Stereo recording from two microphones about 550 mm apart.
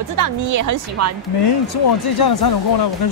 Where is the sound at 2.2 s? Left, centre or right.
Left.